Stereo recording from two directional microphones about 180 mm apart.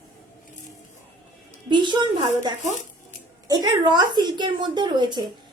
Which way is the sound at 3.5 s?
25° right (ahead or behind).